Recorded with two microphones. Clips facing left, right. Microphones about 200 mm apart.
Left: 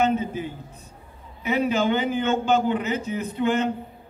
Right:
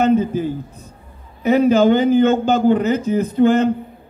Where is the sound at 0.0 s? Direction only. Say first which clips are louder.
Right 7 dB; 40° right (ahead or behind).